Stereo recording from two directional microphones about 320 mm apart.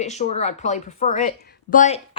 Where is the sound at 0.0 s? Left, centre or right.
Left.